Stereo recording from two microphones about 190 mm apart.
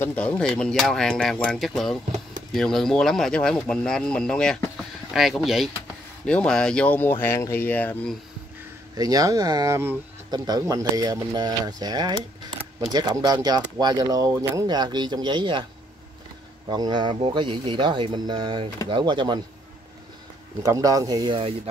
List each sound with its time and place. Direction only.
0.0 s speech: 10° left (ahead or behind)
8.9 s speech: 20° right (ahead or behind)
16.6 s speech: 20° right (ahead or behind)
20.6 s speech: 20° right (ahead or behind)